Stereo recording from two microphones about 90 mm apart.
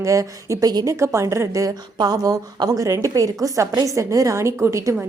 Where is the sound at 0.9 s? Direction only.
30° right (ahead or behind).